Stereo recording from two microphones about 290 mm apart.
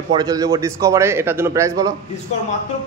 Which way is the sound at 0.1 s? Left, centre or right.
Centre.